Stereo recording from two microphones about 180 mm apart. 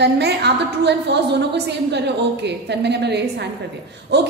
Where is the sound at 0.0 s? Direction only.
70° right (ahead or behind).